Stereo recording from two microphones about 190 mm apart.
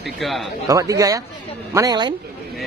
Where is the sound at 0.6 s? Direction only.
15° right (ahead or behind).